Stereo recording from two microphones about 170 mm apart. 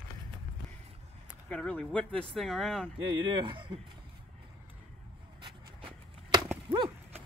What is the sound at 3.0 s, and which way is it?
Speech, 30° right (ahead or behind).